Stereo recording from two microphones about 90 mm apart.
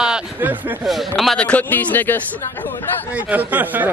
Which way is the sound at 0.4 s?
20° right (ahead or behind).